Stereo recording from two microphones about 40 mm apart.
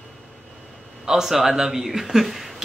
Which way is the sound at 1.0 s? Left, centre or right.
Centre.